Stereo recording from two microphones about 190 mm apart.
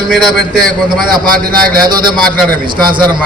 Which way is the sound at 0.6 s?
50° right (ahead or behind).